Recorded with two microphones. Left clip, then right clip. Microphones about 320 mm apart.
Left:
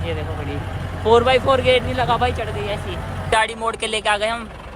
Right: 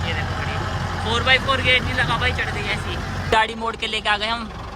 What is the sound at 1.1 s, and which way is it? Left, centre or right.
Speech, centre.